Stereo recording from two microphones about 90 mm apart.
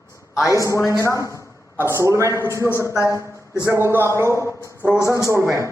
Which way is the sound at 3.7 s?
30° right (ahead or behind).